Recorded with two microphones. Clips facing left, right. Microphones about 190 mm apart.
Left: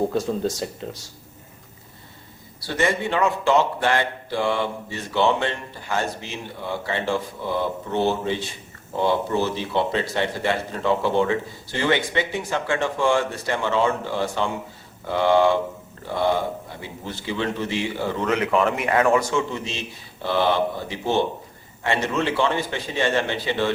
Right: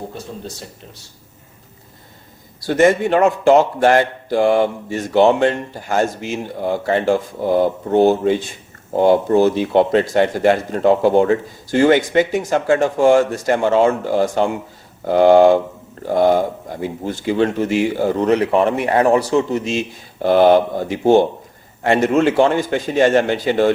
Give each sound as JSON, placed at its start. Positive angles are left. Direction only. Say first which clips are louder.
{"t": 2.6, "sound": "a man's voice", "louder": "right 9 dB", "side_deg": -45}